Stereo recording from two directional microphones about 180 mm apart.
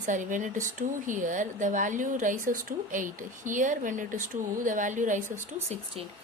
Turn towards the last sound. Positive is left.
turn(degrees=-40)  # may be behind; listen again after turning